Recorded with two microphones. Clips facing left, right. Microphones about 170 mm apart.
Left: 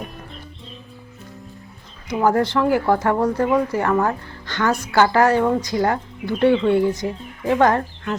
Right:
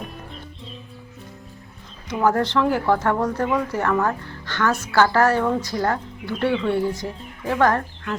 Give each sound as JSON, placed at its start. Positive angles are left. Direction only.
{"t": 2.0, "sound": "speech", "side_deg": 10}